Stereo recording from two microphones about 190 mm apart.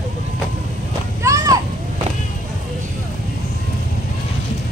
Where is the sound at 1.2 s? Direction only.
20° right (ahead or behind).